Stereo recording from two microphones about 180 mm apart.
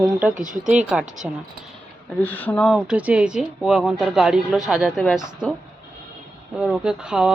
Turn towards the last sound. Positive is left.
turn(degrees=-5)  # may be behind; listen again after turning